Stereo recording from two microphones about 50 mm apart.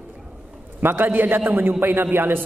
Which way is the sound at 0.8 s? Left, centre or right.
Right.